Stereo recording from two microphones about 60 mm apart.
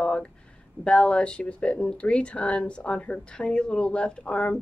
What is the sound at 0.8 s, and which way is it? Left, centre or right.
Speech, centre.